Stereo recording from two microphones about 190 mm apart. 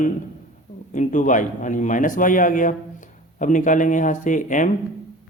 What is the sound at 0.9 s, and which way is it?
A man's voice, 40° left (ahead or behind).